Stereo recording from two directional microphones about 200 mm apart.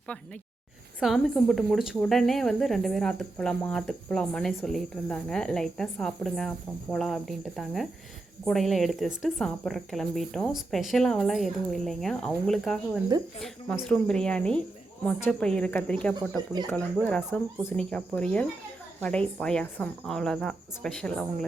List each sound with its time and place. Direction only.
0.9 s speech: centre (ahead or behind)